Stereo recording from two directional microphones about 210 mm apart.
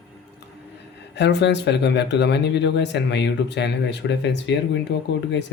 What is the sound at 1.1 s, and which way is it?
Speech, 55° left (ahead or behind).